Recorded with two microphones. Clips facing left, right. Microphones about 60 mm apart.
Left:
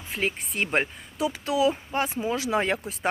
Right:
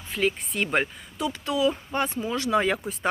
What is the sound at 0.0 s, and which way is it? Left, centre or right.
Speech, centre.